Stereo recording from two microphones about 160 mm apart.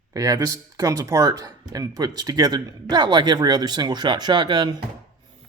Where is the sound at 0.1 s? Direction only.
20° right (ahead or behind).